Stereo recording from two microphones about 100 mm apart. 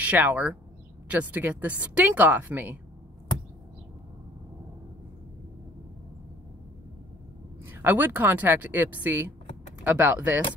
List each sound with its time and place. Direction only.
0.0 s speech: 15° right (ahead or behind)
7.7 s speech: 20° right (ahead or behind)